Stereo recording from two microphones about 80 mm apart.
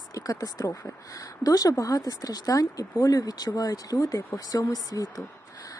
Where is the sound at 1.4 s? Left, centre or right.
Left.